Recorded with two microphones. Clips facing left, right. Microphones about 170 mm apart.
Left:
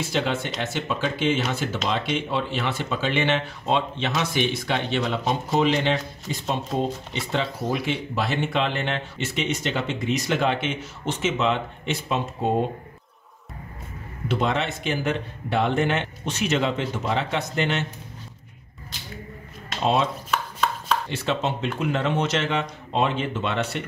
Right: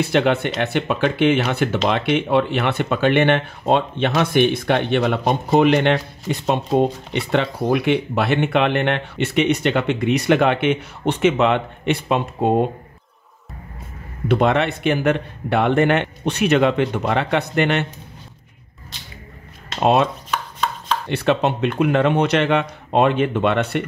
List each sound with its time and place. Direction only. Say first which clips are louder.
0.0 s speech: right 8 dB; 60° right (ahead or behind)
14.2 s speech: right 7 dB; 60° right (ahead or behind)
19.8 s speech: right 6 dB; 60° right (ahead or behind)
20.2 s chopping: right 1 dB; centre (ahead or behind)
21.1 s speech: right 7 dB; 65° right (ahead or behind)